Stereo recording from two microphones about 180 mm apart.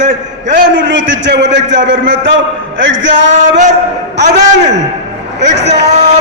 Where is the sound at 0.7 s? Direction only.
90° right.